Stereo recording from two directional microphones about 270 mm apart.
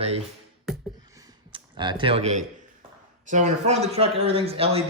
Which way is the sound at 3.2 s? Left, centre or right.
Right.